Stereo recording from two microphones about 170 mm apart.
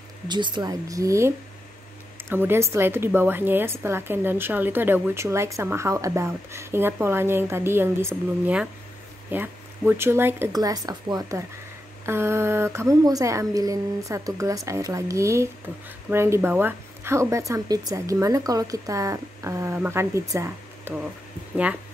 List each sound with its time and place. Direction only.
0.3 s a woman's voice: 25° right (ahead or behind)